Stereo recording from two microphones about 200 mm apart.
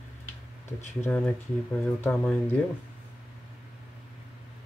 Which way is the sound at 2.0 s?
10° left (ahead or behind).